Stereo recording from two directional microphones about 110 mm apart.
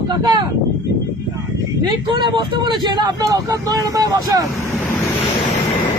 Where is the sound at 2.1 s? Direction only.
45° right (ahead or behind).